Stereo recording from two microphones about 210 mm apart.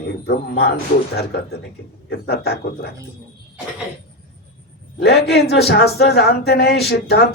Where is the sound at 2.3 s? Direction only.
50° left (ahead or behind).